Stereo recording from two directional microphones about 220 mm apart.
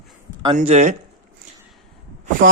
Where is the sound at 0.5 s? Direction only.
30° right (ahead or behind).